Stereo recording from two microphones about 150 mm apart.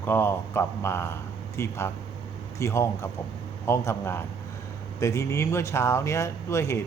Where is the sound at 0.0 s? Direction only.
15° left (ahead or behind).